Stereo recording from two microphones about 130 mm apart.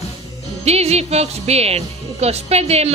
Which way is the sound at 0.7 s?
55° right (ahead or behind).